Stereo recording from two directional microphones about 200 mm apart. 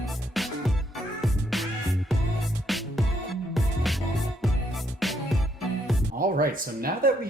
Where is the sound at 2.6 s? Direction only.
Centre (ahead or behind).